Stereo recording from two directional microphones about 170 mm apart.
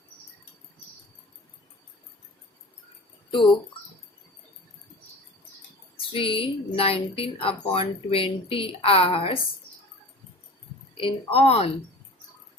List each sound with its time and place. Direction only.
6.1 s speech: 30° left (ahead or behind)
10.9 s speech: 35° left (ahead or behind)